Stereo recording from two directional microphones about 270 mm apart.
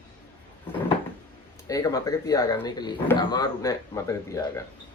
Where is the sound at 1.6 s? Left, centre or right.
Centre.